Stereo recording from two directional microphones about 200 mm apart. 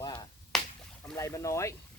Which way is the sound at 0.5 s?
Centre (ahead or behind).